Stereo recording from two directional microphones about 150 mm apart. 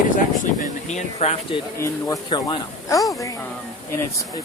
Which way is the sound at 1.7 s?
20° left (ahead or behind).